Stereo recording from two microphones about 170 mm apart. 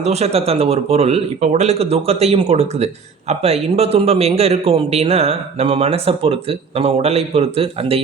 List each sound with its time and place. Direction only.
0.0 s speech: 40° right (ahead or behind)